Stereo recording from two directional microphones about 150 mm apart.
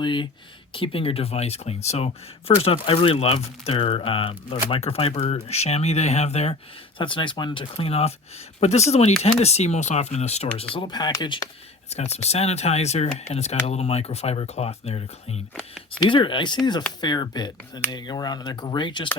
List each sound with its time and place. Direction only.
0.0 s speech: 30° left (ahead or behind)
7.0 s speech: 35° left (ahead or behind)
10.8 s speech: 30° left (ahead or behind)
11.9 s speech: 45° left (ahead or behind)